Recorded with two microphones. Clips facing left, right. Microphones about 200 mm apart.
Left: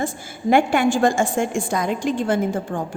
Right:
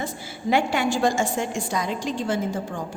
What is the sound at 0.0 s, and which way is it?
A woman's voice, 50° left (ahead or behind).